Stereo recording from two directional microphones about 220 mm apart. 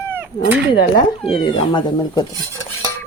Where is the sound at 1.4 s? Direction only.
20° left (ahead or behind).